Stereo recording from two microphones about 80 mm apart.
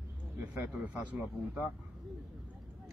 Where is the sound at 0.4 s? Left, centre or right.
Right.